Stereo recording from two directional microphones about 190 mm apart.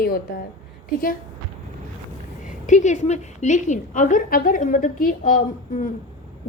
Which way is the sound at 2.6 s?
40° left (ahead or behind).